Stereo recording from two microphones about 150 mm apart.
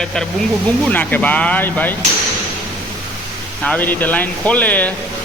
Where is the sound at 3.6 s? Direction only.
10° left (ahead or behind).